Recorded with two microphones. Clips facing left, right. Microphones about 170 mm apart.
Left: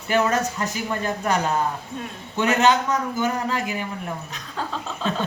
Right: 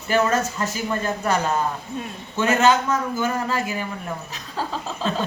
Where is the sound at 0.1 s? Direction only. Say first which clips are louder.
Right 1 dB; 15° left (ahead or behind).